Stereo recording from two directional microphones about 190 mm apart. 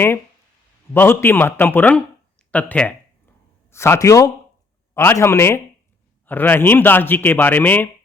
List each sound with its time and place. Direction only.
0.9 s a man's voice: 10° left (ahead or behind)